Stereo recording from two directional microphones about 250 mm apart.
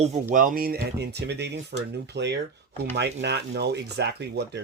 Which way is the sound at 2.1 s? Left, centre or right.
Right.